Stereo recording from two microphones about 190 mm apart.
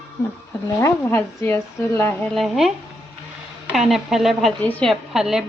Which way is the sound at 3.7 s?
Centre (ahead or behind).